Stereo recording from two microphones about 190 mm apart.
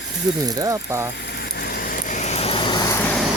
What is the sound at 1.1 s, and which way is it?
Vehicle, 60° left (ahead or behind).